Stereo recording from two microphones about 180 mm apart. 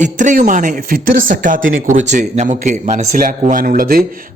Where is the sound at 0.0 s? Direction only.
45° right (ahead or behind).